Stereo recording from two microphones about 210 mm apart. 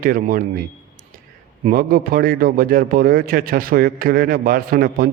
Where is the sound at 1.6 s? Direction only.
40° right (ahead or behind).